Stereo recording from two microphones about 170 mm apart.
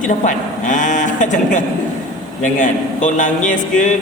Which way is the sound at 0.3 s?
50° left (ahead or behind).